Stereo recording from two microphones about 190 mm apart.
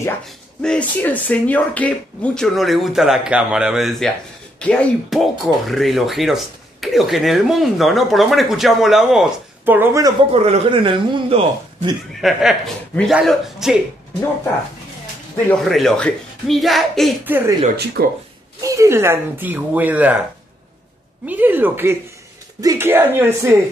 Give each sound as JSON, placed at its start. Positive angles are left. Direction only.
{"t": 0.6, "sound": "speech", "side_deg": 5}
{"t": 10.3, "sound": "a man's voice", "side_deg": -30}
{"t": 12.1, "sound": "speech", "side_deg": 0}
{"t": 15.5, "sound": "speech", "side_deg": 0}
{"t": 17.2, "sound": "speech", "side_deg": -10}
{"t": 17.7, "sound": "speech", "side_deg": -60}
{"t": 18.6, "sound": "speech", "side_deg": -15}
{"t": 21.3, "sound": "speech", "side_deg": -10}